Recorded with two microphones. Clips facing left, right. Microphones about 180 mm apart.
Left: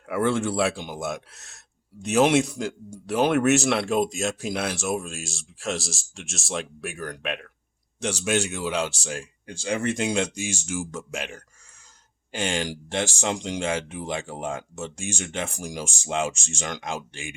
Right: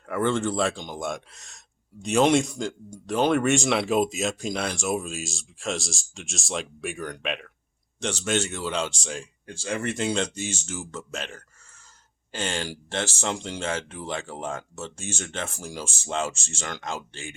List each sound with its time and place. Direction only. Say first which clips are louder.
0.0 s speech: left 1 dB; 10° left (ahead or behind)